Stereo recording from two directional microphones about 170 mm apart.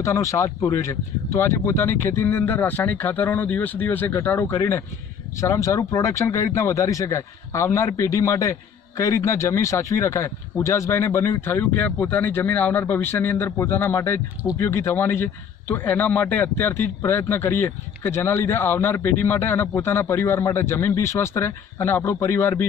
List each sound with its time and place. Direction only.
0.0 s speech: 20° left (ahead or behind)